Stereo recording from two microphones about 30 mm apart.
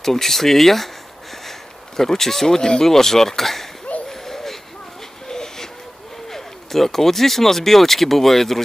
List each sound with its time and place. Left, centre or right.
0.0 s speech: centre
2.0 s speech: centre
4.1 s a sound: centre
5.3 s train: centre
6.3 s speech: centre